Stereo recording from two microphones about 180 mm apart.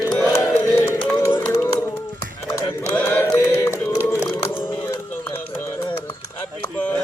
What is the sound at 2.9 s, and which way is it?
Chant, 10° left (ahead or behind).